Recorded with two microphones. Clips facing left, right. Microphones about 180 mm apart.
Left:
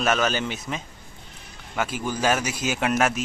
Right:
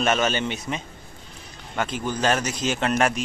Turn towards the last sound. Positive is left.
turn(degrees=5)  # may be behind; listen again after turning